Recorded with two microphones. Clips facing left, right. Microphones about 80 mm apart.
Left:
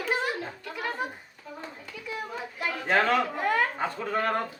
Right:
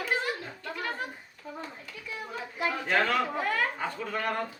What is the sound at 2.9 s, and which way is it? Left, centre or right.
A man's voice, left.